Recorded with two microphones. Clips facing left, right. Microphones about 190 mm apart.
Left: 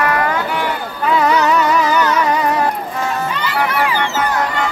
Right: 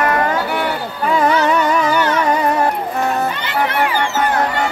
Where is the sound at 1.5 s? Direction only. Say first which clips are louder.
Left 1 dB; 50° right (ahead or behind).